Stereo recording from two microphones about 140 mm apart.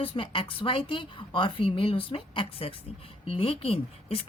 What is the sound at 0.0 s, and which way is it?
A woman's voice, 40° left (ahead or behind).